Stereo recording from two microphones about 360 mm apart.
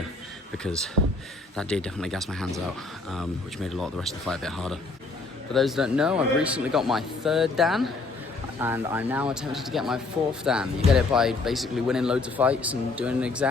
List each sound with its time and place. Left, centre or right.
1.0 s speech: right
1.5 s speech: centre
3.7 s speech: centre